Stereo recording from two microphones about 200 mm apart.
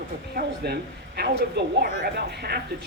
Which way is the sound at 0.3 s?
50° right (ahead or behind).